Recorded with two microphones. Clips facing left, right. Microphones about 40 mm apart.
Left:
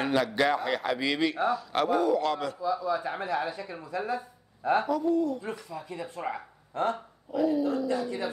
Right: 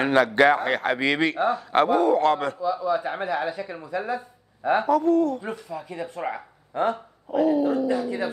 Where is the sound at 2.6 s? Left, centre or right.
Centre.